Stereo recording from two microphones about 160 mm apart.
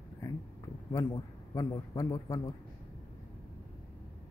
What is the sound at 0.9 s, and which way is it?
A man's voice, 20° left (ahead or behind).